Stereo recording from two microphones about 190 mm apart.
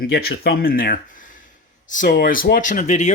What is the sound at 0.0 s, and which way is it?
Speech, 55° left (ahead or behind).